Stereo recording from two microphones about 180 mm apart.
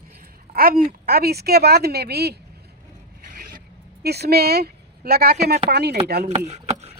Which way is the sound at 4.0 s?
65° right (ahead or behind).